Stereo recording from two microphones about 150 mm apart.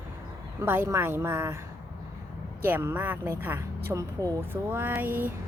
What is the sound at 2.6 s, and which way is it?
Speech, 15° right (ahead or behind).